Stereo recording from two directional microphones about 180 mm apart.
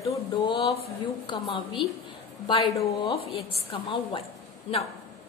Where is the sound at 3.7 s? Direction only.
30° left (ahead or behind).